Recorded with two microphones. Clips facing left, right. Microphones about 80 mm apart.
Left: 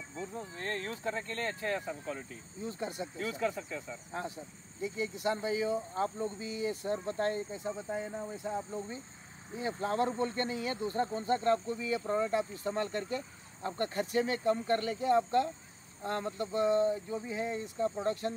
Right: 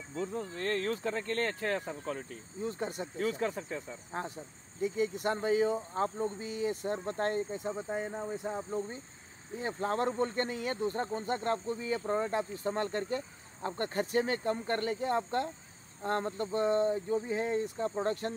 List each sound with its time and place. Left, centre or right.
0.2 s speech: right
2.8 s speech: right
9.6 s speech: right